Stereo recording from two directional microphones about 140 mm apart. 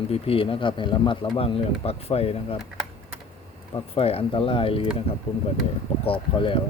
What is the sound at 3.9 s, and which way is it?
Speech, 45° left (ahead or behind).